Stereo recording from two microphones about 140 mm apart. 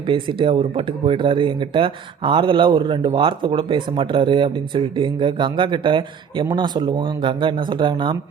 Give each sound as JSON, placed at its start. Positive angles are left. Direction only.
{"t": 0.1, "sound": "speech", "side_deg": -40}